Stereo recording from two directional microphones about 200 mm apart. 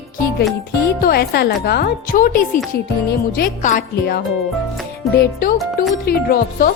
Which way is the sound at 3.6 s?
45° left (ahead or behind).